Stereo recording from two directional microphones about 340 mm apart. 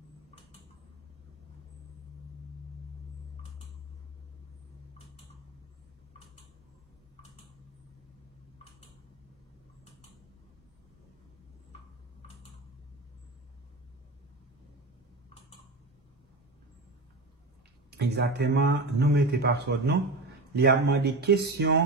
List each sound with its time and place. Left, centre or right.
17.9 s speech: right